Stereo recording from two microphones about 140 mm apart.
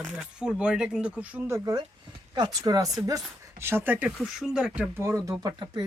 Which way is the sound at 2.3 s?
30° right (ahead or behind).